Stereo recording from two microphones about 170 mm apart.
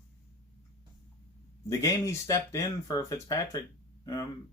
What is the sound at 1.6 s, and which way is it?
Speech, 20° left (ahead or behind).